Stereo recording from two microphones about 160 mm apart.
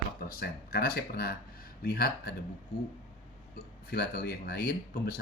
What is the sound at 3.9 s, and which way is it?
Speech, 80° left.